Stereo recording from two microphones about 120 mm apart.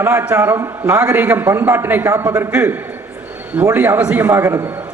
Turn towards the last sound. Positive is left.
turn(degrees=-25)  # may be behind; listen again after turning